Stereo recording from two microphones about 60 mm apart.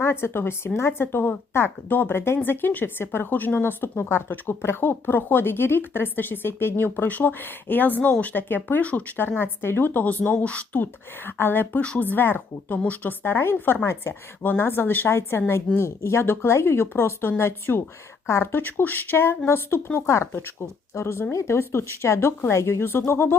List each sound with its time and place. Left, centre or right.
0.0 s a woman's voice: left
8.8 s speech: left
9.1 s speech: left
11.3 s speech: left
11.8 s speech: left
13.2 s a woman's voice: left
20.1 s a woman's voice: left